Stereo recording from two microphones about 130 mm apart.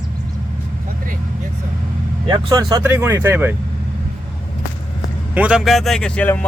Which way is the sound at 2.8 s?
15° right (ahead or behind).